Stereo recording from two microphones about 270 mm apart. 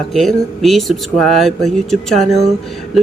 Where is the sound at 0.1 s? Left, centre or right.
Centre.